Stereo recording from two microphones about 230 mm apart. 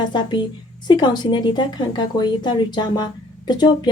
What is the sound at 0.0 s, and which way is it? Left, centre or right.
A woman's voice, centre.